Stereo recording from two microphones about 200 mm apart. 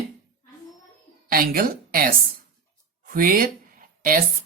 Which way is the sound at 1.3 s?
45° right (ahead or behind).